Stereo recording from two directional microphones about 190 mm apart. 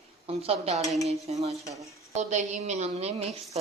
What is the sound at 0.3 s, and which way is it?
A woman's voice, 30° right (ahead or behind).